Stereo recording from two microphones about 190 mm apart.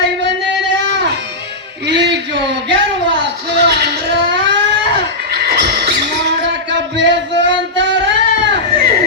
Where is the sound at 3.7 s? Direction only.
60° right (ahead or behind).